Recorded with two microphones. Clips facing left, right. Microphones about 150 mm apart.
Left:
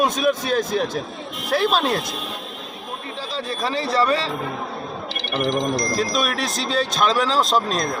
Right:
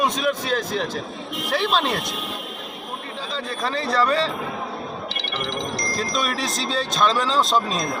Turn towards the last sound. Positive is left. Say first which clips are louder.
# left 1 dB
turn(degrees=0)  # may be behind; listen again after turning